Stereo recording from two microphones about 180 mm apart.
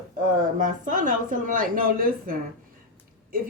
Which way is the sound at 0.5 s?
50° right (ahead or behind).